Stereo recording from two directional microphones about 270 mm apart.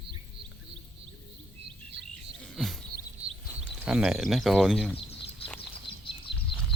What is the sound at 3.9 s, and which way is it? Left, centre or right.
Speech, centre.